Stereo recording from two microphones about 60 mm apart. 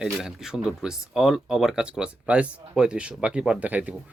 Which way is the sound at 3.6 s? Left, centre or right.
Right.